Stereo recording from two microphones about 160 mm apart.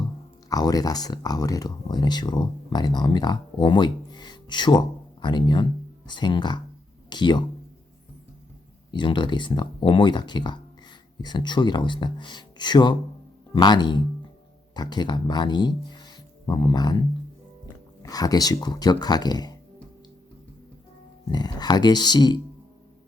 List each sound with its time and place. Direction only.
0.5 s speech: 25° left (ahead or behind)
8.9 s speech: 30° left (ahead or behind)
18.0 s speech: 25° left (ahead or behind)
21.2 s speech: 25° left (ahead or behind)